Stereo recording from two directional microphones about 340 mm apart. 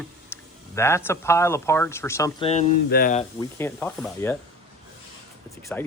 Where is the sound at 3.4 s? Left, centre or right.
Centre.